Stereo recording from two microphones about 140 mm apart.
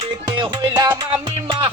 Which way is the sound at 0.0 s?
35° right (ahead or behind).